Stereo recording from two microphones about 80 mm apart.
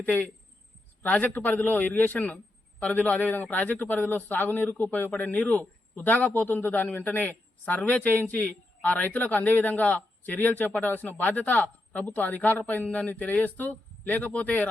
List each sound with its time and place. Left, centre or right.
0.0 s a man's voice: left